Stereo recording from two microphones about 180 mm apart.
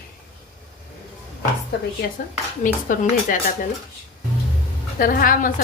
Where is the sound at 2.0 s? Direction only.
60° left (ahead or behind).